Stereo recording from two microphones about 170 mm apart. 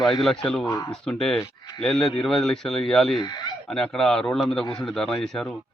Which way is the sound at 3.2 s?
25° left (ahead or behind).